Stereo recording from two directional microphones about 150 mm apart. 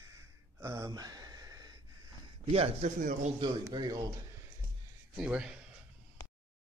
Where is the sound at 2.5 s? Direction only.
40° right (ahead or behind).